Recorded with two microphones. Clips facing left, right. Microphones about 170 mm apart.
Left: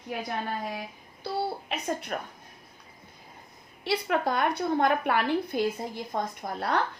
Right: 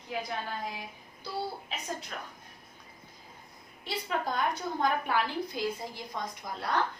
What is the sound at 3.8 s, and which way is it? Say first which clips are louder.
A woman's voice: left 6 dB; 70° left (ahead or behind).